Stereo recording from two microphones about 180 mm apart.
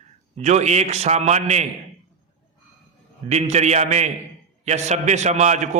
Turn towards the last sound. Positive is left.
turn(degrees=-40)  # may be behind; listen again after turning